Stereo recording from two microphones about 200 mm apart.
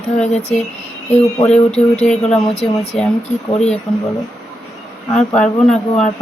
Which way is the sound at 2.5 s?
30° left (ahead or behind).